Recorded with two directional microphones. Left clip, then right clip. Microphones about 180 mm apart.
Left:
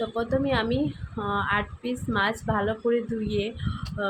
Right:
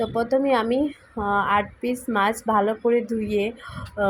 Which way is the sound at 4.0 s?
20° right (ahead or behind).